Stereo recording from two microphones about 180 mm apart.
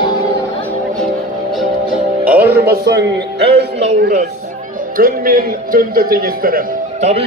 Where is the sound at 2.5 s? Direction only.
65° right (ahead or behind).